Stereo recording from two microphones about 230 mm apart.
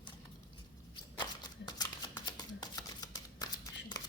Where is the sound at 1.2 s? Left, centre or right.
Centre.